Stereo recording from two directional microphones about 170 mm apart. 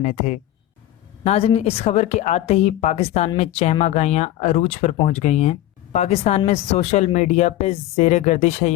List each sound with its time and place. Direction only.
0.0 s speech: 45° left (ahead or behind)